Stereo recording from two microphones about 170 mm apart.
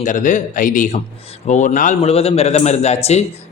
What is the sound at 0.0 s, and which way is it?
Speech, 50° left (ahead or behind).